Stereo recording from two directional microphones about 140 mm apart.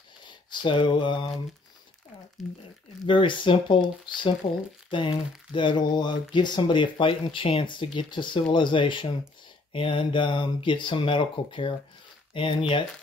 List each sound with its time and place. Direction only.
0.5 s speech: 35° left (ahead or behind)
3.1 s speech: 35° left (ahead or behind)